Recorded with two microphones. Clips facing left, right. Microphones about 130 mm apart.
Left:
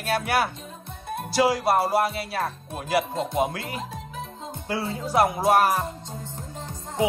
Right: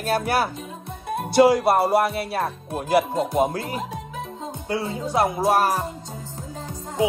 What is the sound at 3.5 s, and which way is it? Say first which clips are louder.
Music: right 5 dB; 35° right (ahead or behind).